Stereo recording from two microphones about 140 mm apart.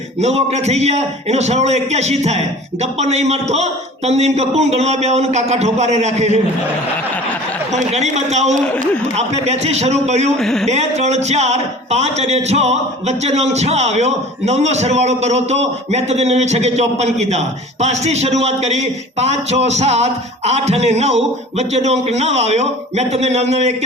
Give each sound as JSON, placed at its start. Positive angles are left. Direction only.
{"t": 0.2, "sound": "speech", "side_deg": -50}
{"t": 7.7, "sound": "a man's voice", "side_deg": -55}
{"t": 10.3, "sound": "speech", "side_deg": 0}
{"t": 10.7, "sound": "speech", "side_deg": -50}